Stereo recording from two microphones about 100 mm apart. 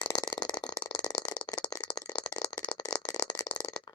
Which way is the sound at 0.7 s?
45° left (ahead or behind).